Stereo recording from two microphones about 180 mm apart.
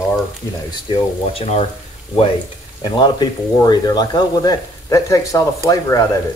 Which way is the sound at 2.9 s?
25° left (ahead or behind).